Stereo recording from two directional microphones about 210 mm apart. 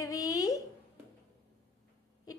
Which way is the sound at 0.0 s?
15° left (ahead or behind).